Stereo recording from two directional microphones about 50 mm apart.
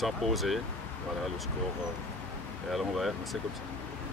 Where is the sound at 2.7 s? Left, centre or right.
Centre.